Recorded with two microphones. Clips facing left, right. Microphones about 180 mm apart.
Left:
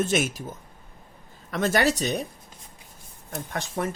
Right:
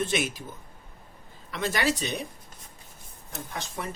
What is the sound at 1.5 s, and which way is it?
Speech, 45° left (ahead or behind).